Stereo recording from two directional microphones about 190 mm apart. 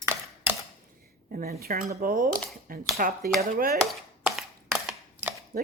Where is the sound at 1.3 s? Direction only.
50° right (ahead or behind).